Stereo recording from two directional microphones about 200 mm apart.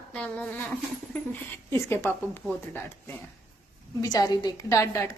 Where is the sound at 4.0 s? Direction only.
20° left (ahead or behind).